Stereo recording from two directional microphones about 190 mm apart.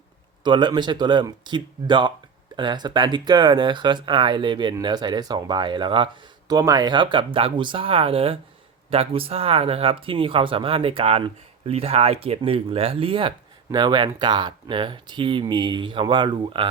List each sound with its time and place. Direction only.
0.4 s speech: 25° right (ahead or behind)